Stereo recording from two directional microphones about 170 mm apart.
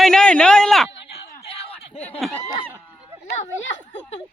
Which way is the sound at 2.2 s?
Centre (ahead or behind).